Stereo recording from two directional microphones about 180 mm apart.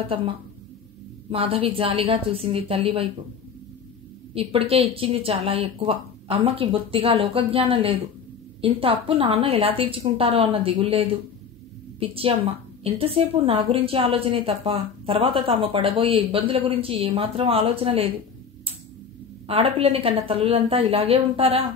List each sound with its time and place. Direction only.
1.3 s a woman's voice: 30° right (ahead or behind)
4.3 s a woman's voice: 35° right (ahead or behind)
19.4 s a woman's voice: 30° right (ahead or behind)